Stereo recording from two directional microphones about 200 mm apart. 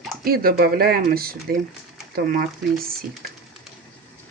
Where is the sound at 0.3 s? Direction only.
50° right (ahead or behind).